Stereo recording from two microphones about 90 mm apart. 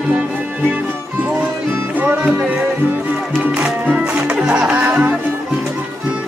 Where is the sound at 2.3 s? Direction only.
15° right (ahead or behind).